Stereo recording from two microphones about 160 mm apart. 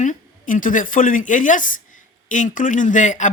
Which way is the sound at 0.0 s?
55° left (ahead or behind).